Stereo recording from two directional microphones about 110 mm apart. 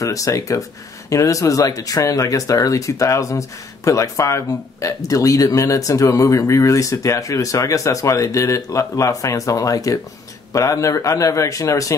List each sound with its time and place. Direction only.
0.0 s speech: 30° left (ahead or behind)